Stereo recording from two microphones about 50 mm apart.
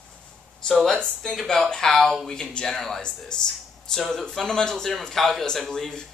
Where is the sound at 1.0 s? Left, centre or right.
Centre.